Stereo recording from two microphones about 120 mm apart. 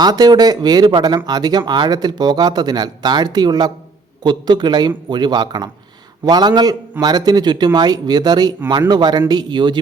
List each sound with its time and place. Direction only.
0.0 s speech: 35° right (ahead or behind)